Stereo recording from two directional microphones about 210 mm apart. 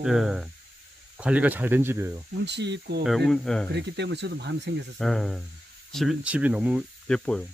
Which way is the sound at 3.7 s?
55° right (ahead or behind).